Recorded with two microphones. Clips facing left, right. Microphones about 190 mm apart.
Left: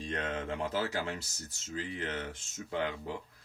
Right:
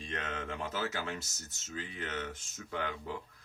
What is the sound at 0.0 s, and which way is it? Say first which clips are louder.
Speech: left 4 dB; 35° left (ahead or behind).